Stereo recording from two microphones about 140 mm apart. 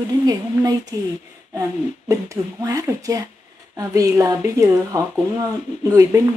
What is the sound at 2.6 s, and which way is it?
Speech, 25° right (ahead or behind).